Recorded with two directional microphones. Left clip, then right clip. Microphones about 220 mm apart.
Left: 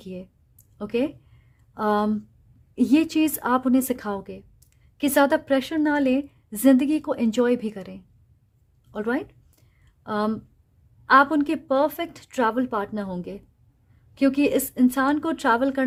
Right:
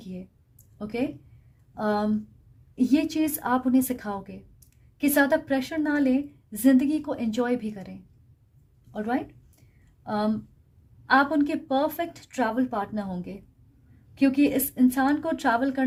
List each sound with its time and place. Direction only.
0.8 s a woman's voice: 35° left (ahead or behind)